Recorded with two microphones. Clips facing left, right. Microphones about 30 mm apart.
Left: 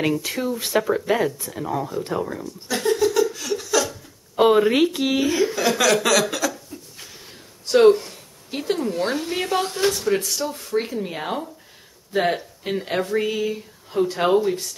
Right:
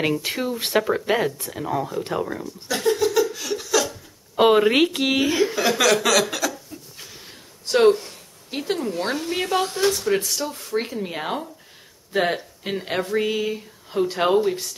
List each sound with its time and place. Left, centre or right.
0.2 s speech: right
2.0 s chuckle: centre
4.4 s a woman's voice: centre